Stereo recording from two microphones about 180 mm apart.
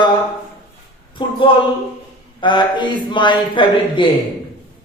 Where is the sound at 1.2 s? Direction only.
25° left (ahead or behind).